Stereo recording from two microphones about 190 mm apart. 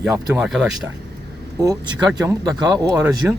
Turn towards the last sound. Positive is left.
turn(degrees=-5)  # may be behind; listen again after turning